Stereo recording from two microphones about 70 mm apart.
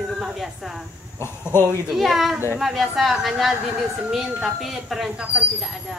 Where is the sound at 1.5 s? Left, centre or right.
Left.